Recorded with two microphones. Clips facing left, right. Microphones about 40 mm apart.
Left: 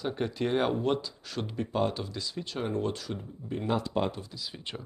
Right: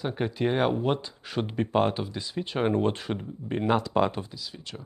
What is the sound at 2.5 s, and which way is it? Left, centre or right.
Speech, right.